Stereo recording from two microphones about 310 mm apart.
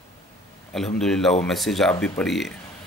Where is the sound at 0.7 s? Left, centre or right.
Centre.